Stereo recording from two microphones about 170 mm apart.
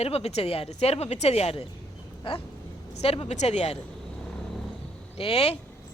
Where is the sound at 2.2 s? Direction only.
30° left (ahead or behind).